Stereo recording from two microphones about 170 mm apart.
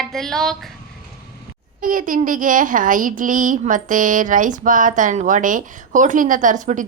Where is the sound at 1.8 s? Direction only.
50° right (ahead or behind).